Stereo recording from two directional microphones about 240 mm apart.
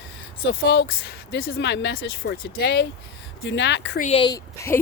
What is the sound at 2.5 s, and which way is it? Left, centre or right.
Speech, left.